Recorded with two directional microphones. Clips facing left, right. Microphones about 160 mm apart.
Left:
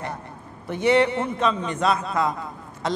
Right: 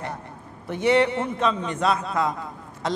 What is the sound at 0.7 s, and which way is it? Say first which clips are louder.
A man's voice: left 1 dB; 15° left (ahead or behind).